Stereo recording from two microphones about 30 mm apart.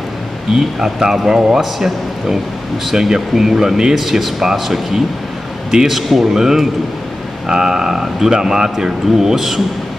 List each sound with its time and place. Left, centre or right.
0.6 s a man's voice: centre
4.0 s speech: centre